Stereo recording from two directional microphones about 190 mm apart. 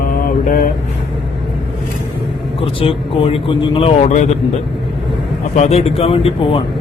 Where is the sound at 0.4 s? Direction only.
45° left (ahead or behind).